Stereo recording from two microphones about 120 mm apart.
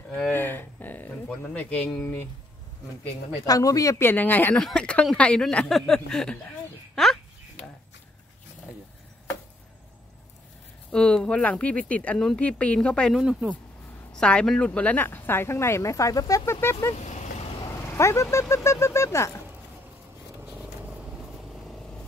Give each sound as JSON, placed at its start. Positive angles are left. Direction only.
{"t": 0.3, "sound": "a sound", "side_deg": 15}
{"t": 3.4, "sound": "speech", "side_deg": 30}
{"t": 4.1, "sound": "speech", "side_deg": 15}
{"t": 10.9, "sound": "speech", "side_deg": 5}
{"t": 13.1, "sound": "speech", "side_deg": -5}
{"t": 14.1, "sound": "speech", "side_deg": 5}
{"t": 17.0, "sound": "vehicle", "side_deg": 75}
{"t": 17.9, "sound": "speech", "side_deg": 25}